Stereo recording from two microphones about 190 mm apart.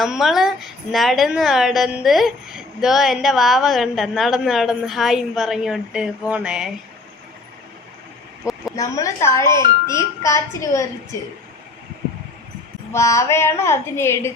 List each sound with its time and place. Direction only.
0.0 s a woman's voice: centre (ahead or behind)
8.7 s speech: 15° left (ahead or behind)
12.9 s speech: 15° left (ahead or behind)